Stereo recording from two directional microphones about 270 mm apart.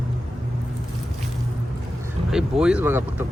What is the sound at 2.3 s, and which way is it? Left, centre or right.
Speech, centre.